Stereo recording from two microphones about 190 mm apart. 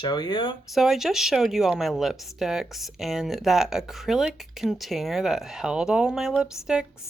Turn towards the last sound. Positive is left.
turn(degrees=-5)  # may be behind; listen again after turning